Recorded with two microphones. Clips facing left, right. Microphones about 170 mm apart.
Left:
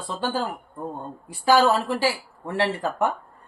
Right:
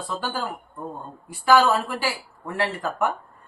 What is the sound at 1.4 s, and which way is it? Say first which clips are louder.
Speech: even; 30° left (ahead or behind).